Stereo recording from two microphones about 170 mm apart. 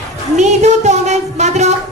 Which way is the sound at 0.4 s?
45° right (ahead or behind).